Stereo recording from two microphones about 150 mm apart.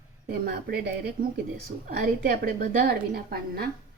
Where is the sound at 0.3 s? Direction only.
90° right.